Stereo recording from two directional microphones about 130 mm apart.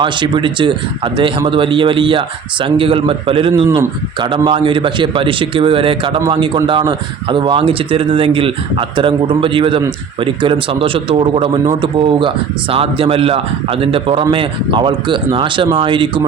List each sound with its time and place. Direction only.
0.0 s speech: 40° right (ahead or behind)